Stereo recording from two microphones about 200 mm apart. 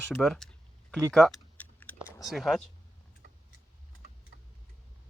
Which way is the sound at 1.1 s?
5° left (ahead or behind).